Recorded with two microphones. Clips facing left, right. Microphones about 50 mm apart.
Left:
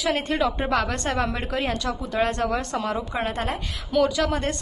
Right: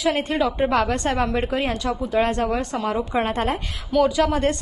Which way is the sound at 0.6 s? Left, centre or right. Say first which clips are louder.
Right 4 dB; right.